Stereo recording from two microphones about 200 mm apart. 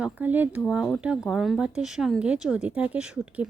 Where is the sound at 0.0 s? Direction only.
10° right (ahead or behind).